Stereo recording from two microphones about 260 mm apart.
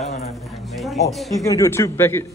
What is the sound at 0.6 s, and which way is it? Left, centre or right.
Speech, centre.